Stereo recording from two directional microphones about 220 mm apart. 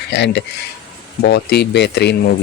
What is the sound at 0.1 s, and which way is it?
Speech, 50° left (ahead or behind).